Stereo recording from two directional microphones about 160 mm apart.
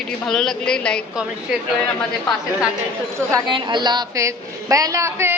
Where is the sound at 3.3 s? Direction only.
25° right (ahead or behind).